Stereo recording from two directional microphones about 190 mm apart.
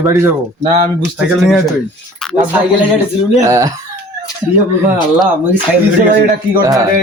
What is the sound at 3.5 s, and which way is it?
Speech, 15° right (ahead or behind).